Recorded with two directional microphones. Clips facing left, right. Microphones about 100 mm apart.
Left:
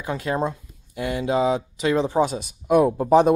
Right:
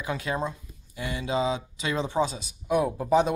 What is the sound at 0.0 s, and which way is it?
Speech, 40° left (ahead or behind).